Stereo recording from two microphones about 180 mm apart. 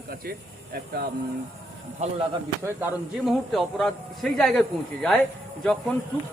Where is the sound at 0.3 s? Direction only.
60° right (ahead or behind).